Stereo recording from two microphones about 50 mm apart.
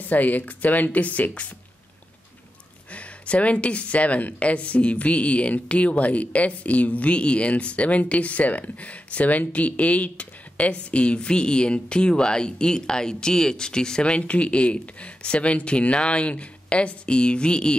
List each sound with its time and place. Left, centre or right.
0.0 s speech: left
2.9 s speech: left